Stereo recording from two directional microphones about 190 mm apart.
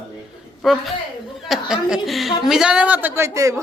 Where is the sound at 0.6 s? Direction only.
Centre (ahead or behind).